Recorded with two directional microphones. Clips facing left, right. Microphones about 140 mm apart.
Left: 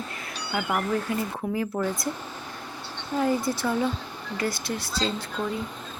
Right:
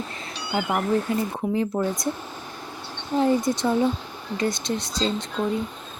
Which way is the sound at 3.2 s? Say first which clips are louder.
Right 4 dB; 25° right (ahead or behind).